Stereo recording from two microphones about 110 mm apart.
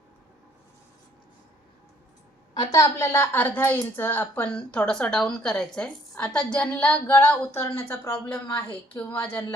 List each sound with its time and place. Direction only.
2.6 s a woman's voice: 30° left (ahead or behind)